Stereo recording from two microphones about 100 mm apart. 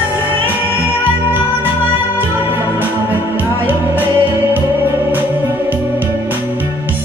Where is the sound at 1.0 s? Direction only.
20° right (ahead or behind).